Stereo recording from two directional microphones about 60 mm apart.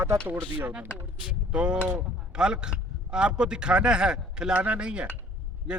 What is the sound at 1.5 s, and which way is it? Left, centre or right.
A man's voice, centre.